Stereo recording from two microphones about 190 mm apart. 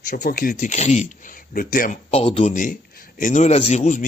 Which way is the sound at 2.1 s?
30° left (ahead or behind).